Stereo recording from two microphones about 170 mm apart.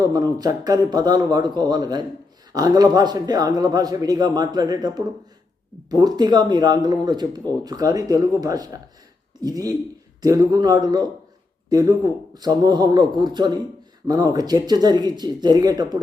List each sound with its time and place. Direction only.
0.0 s a man's voice: 20° right (ahead or behind)